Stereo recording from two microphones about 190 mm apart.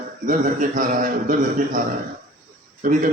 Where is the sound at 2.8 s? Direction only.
45° right (ahead or behind).